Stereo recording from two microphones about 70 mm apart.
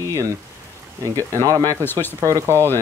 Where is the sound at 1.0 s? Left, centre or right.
Right.